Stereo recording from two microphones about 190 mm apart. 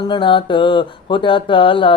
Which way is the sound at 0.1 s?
25° left (ahead or behind).